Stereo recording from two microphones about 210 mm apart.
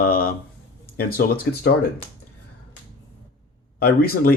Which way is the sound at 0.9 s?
45° left (ahead or behind).